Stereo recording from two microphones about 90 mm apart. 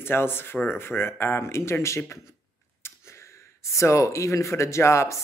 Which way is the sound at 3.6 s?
35° left (ahead or behind).